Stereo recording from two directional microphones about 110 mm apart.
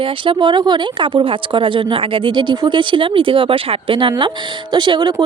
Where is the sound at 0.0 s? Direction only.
45° right (ahead or behind).